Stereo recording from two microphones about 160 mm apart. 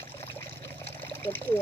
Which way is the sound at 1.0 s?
10° left (ahead or behind).